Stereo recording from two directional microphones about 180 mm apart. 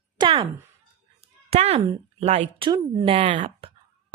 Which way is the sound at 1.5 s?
35° right (ahead or behind).